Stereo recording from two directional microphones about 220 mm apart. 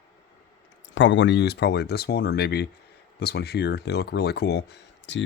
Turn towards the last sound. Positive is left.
turn(degrees=55)  # may be behind; listen again after turning